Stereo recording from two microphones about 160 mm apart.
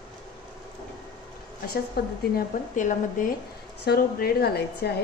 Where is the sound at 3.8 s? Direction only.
75° left (ahead or behind).